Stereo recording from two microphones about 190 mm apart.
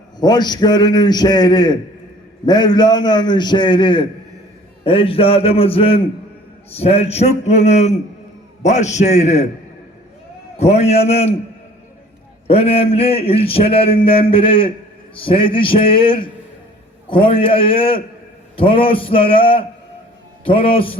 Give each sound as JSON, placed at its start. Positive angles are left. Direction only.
{"t": 0.2, "sound": "a man's voice", "side_deg": 20}
{"t": 10.6, "sound": "a man's voice", "side_deg": 35}
{"t": 12.5, "sound": "a man's voice", "side_deg": 30}